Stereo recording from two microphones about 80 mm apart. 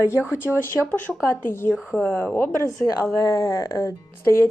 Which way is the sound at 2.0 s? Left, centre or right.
Left.